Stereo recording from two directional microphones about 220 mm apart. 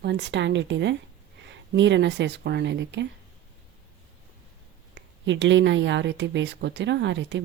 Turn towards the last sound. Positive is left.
turn(degrees=-55)  # may be behind; listen again after turning